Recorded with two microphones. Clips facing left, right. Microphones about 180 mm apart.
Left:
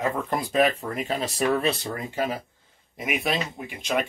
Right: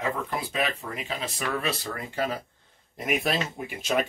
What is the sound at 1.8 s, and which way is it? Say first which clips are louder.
Speech: left 2 dB; 20° left (ahead or behind).